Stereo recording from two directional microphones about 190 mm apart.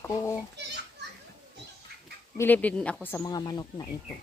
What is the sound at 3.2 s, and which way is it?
Speech, 20° left (ahead or behind).